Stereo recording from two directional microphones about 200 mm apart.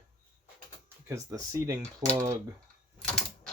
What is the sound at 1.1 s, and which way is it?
Speech, 15° right (ahead or behind).